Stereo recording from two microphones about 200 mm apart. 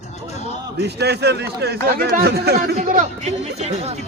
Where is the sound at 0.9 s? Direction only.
55° right (ahead or behind).